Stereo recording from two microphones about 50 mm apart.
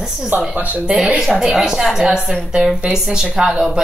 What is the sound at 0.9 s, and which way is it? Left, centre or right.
Speech, centre.